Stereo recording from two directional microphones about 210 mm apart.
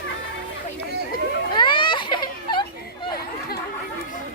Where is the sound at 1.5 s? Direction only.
20° left (ahead or behind).